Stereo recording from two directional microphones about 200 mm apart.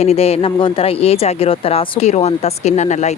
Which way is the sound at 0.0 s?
30° left (ahead or behind).